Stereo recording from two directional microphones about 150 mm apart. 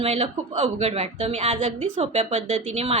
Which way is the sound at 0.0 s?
40° right (ahead or behind).